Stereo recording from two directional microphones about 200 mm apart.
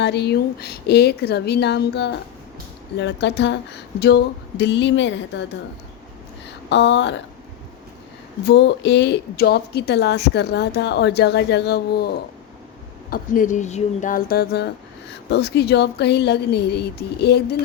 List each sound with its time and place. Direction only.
0.0 s speech: 55° left (ahead or behind)
6.7 s speech: 65° left (ahead or behind)
8.4 s speech: 60° left (ahead or behind)
13.1 s speech: 45° left (ahead or behind)